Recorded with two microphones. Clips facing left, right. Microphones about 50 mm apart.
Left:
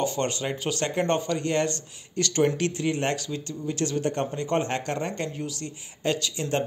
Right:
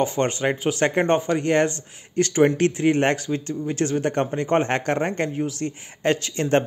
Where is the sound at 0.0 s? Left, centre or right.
Right.